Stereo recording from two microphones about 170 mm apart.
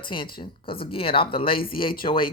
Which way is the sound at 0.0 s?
30° left (ahead or behind).